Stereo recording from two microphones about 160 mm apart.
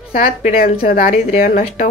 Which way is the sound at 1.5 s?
50° left (ahead or behind).